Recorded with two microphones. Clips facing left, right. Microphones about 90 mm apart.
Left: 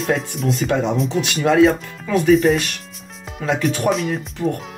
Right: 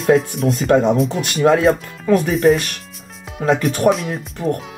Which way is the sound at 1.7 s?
45° right (ahead or behind).